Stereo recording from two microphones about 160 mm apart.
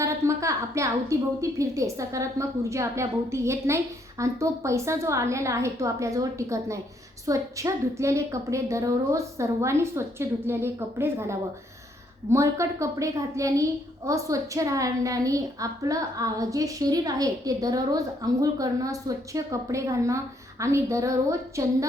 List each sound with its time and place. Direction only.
0.0 s a woman's voice: 20° right (ahead or behind)